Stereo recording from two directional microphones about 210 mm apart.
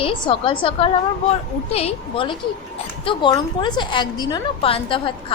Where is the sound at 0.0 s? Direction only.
25° left (ahead or behind).